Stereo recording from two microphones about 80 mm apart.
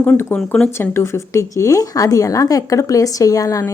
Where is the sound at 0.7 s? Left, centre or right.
Left.